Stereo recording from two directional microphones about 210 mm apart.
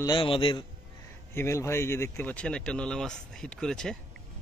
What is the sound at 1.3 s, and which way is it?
Speech, 10° left (ahead or behind).